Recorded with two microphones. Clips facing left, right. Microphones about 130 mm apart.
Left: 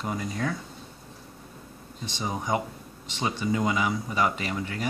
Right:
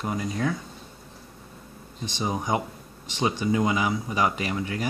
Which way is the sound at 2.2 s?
20° right (ahead or behind).